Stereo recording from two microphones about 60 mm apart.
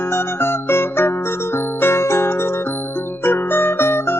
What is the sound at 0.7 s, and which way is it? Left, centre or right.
Music, left.